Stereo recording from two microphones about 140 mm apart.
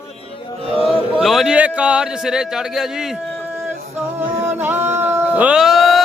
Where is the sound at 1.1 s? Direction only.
Centre (ahead or behind).